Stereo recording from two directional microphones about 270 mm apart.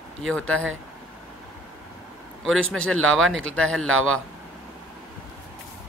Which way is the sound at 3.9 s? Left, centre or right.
Right.